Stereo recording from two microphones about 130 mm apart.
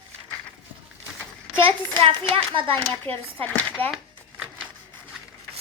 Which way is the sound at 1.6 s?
45° right (ahead or behind).